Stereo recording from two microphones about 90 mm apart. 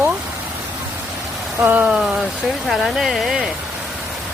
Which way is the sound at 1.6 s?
15° right (ahead or behind).